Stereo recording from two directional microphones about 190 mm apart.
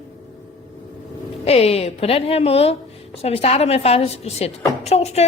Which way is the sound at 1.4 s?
35° left (ahead or behind).